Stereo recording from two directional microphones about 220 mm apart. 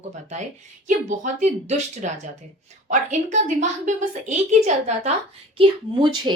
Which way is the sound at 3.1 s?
35° right (ahead or behind).